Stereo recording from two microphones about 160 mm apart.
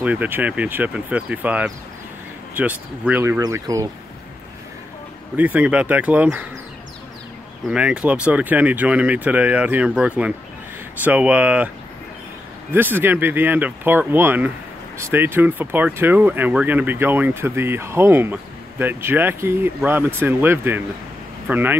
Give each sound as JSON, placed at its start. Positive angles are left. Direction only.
{"t": 0.0, "sound": "speech", "side_deg": -10}
{"t": 5.3, "sound": "speech", "side_deg": -10}
{"t": 7.7, "sound": "speech", "side_deg": -5}
{"t": 12.7, "sound": "speech", "side_deg": -15}